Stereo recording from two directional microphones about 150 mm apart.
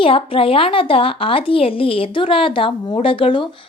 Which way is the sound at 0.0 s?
35° left (ahead or behind).